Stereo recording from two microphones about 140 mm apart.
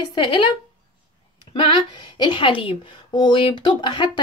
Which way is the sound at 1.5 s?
35° left (ahead or behind).